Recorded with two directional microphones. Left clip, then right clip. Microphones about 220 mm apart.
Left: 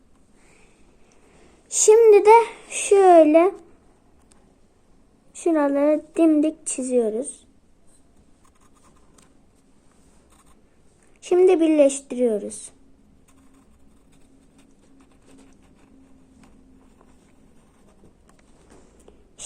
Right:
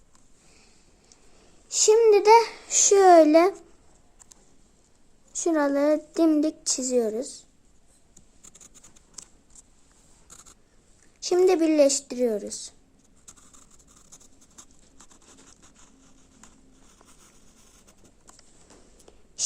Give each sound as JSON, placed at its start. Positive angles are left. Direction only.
{"t": 1.7, "sound": "a sound", "side_deg": 5}
{"t": 2.8, "sound": "speech", "side_deg": -20}
{"t": 5.4, "sound": "speech", "side_deg": -15}
{"t": 6.7, "sound": "a woman's voice", "side_deg": -5}
{"t": 9.2, "sound": "a sound", "side_deg": -45}
{"t": 11.3, "sound": "a woman's voice", "side_deg": -5}